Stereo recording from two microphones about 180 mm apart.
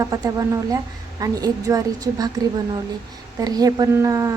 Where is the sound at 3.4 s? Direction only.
20° right (ahead or behind).